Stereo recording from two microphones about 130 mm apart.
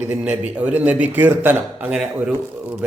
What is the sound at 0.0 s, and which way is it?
A man's voice, 10° right (ahead or behind).